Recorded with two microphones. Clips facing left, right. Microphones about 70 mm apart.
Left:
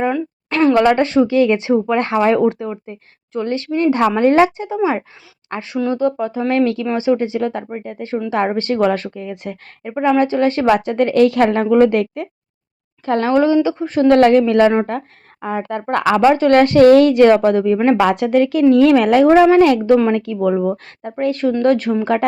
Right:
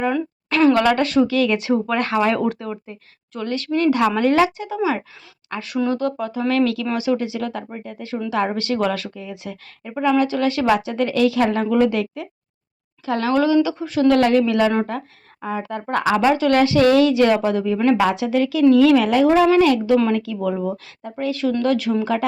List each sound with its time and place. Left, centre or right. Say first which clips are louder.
0.1 s a sound: left 1 dB; centre
0.7 s speech: left 4 dB; left
2.1 s a woman's voice: left 6 dB; centre; by 9.0 s left
9.1 s speech: left 5 dB; left
9.9 s speech: left 3 dB; left
16.2 s speech: left 6 dB; left